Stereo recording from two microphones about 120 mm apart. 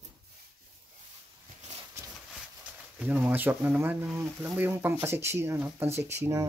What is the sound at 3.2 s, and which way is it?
Speech, 15° right (ahead or behind).